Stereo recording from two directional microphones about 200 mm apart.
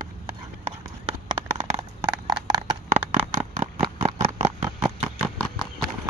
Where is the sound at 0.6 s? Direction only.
30° right (ahead or behind).